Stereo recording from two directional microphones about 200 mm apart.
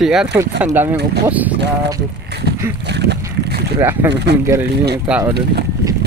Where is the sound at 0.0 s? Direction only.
Centre (ahead or behind).